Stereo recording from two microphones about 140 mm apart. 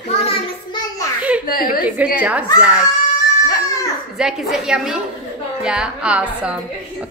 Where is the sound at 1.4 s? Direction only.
90° left.